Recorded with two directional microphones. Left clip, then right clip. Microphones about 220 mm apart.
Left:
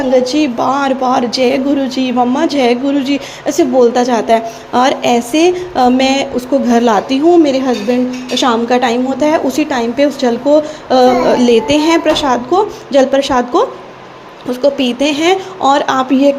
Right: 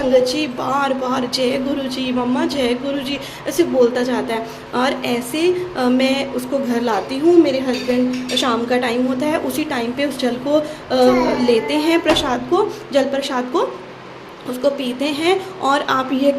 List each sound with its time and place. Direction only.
0.1 s a woman's voice: 20° left (ahead or behind)